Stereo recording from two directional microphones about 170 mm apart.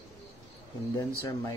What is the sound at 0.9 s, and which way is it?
Speech, 15° left (ahead or behind).